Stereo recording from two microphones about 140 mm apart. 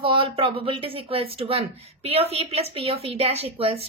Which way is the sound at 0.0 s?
40° right (ahead or behind).